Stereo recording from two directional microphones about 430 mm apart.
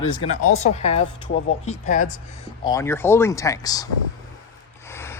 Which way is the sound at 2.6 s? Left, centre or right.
Centre.